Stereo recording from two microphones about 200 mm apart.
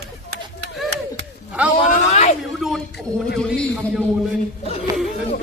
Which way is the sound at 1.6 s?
5° right (ahead or behind).